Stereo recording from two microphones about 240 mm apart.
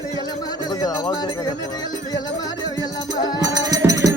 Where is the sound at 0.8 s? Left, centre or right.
Centre.